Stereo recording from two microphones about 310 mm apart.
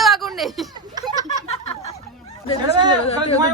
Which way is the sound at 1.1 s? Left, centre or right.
Centre.